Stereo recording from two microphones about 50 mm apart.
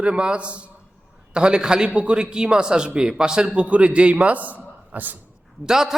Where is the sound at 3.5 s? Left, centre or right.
Right.